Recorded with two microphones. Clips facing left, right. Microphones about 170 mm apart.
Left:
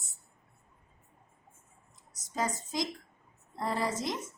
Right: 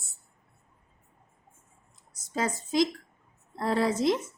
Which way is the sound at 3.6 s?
80° right.